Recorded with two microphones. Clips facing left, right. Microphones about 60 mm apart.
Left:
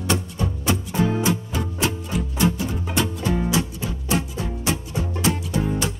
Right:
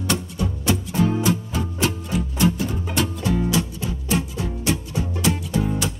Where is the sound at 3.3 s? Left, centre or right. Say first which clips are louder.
Right 1 dB; left.